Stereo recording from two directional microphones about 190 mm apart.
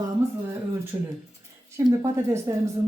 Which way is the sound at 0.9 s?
10° right (ahead or behind).